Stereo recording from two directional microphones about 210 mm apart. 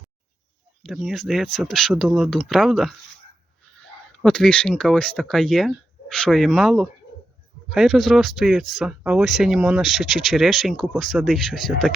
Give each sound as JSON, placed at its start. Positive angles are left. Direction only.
{"t": 0.8, "sound": "speech", "side_deg": 0}